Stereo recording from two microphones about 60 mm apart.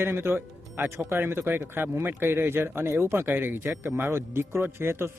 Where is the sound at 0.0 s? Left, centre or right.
Right.